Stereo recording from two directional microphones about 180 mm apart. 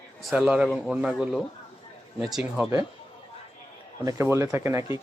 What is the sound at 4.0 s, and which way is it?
Speech, 15° right (ahead or behind).